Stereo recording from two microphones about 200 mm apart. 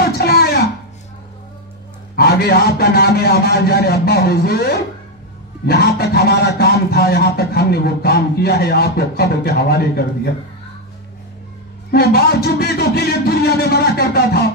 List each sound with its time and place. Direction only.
0.0 s a sound: 50° left (ahead or behind)
2.1 s a man's voice: 50° left (ahead or behind)
11.9 s a man's voice: 50° left (ahead or behind)